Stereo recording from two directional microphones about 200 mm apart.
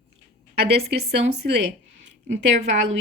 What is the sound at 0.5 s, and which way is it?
A woman's voice, 55° right (ahead or behind).